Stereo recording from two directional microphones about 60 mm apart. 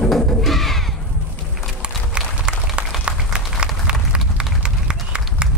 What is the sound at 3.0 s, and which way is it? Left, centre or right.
Run, centre.